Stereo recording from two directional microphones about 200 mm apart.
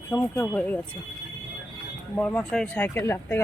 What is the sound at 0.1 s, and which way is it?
Speech, 10° left (ahead or behind).